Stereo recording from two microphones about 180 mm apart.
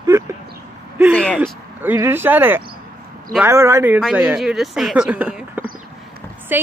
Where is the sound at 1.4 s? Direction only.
10° right (ahead or behind).